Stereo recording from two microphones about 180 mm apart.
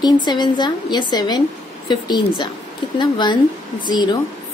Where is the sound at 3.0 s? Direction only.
25° left (ahead or behind).